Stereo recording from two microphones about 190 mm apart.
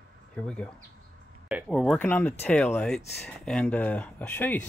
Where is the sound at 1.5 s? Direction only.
5° right (ahead or behind).